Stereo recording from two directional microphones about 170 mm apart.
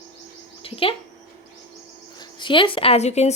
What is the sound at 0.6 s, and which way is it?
Speech, 35° left (ahead or behind).